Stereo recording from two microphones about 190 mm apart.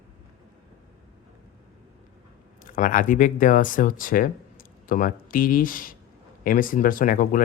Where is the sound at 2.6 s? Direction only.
45° left (ahead or behind).